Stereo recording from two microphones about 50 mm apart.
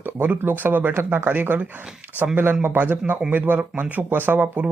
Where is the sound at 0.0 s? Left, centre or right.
Right.